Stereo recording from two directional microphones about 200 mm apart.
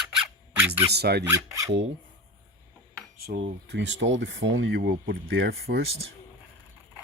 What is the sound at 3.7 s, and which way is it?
Speech, 65° right (ahead or behind).